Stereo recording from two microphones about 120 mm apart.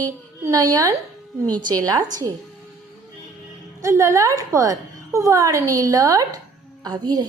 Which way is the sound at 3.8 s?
25° right (ahead or behind).